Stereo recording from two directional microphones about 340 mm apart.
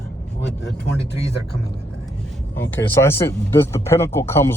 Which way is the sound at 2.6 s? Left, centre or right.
Centre.